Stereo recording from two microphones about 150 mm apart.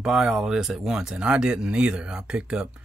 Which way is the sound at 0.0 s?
5° right (ahead or behind).